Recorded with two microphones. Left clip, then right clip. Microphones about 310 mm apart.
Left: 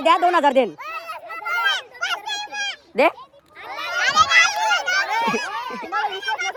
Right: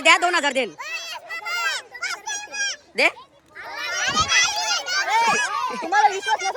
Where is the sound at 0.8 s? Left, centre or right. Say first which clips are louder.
Even; centre.